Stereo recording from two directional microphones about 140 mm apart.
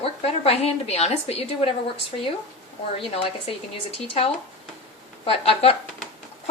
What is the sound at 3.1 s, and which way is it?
Speech, 40° left (ahead or behind).